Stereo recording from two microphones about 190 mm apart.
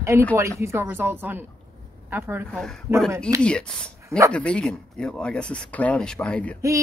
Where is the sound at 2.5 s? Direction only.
5° left (ahead or behind).